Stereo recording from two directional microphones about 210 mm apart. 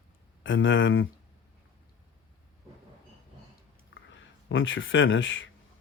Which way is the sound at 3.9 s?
65° left (ahead or behind).